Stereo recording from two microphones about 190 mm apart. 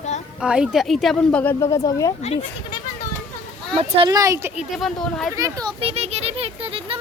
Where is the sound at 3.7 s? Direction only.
30° right (ahead or behind).